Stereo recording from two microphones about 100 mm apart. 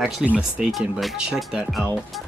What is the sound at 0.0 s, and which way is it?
Speech, 10° right (ahead or behind).